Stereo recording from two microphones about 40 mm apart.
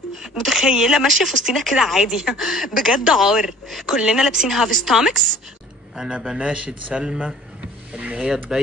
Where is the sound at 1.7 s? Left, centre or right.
Centre.